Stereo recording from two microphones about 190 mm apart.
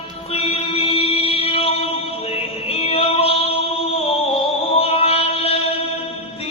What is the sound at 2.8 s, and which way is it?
Music, 30° left (ahead or behind).